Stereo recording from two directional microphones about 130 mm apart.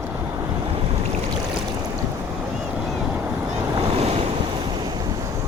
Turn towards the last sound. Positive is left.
turn(degrees=-50)  # may be behind; listen again after turning